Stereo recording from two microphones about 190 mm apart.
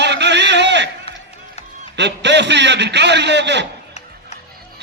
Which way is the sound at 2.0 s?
65° right (ahead or behind).